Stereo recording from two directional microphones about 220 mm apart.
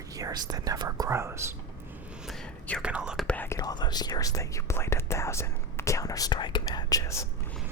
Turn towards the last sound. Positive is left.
turn(degrees=15)  # may be behind; listen again after turning